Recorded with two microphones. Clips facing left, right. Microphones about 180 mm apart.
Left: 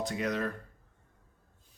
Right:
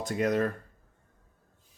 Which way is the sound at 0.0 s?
45° right (ahead or behind).